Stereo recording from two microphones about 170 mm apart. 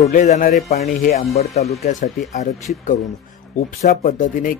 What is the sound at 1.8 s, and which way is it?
A man's voice, 45° left (ahead or behind).